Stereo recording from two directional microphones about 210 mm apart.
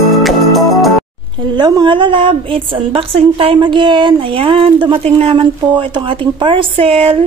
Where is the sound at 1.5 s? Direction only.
20° right (ahead or behind).